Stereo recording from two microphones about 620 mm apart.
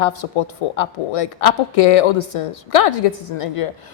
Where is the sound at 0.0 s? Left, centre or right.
Left.